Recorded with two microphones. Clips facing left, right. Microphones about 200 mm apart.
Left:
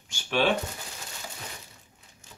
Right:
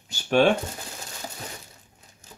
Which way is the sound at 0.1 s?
45° right (ahead or behind).